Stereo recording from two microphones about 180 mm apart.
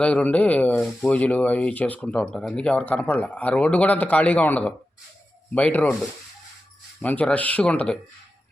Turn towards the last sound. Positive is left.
turn(degrees=5)  # may be behind; listen again after turning